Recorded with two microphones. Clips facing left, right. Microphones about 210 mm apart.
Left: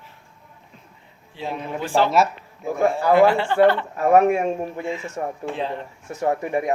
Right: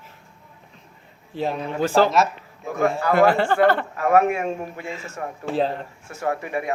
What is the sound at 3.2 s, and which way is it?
Speech, 45° right (ahead or behind).